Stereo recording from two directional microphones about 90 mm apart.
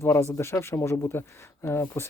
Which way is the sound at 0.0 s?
30° left (ahead or behind).